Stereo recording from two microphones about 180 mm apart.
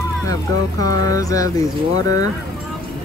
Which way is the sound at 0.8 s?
20° left (ahead or behind).